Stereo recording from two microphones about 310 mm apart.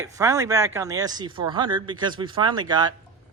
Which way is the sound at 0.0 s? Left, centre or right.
Centre.